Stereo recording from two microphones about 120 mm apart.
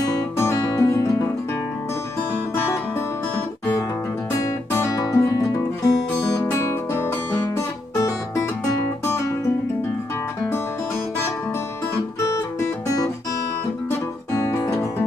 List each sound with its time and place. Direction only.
0.0 s music: 30° left (ahead or behind)
4.4 s music: 25° left (ahead or behind)
12.3 s music: 25° left (ahead or behind)